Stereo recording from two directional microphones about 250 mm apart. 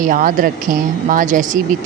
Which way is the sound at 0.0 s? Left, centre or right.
Right.